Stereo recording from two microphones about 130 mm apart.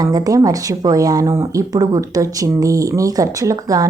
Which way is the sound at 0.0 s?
30° right (ahead or behind).